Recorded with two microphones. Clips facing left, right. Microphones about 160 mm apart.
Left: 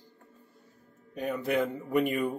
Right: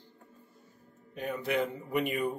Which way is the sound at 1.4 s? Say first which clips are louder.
Left 2 dB; 45° left (ahead or behind).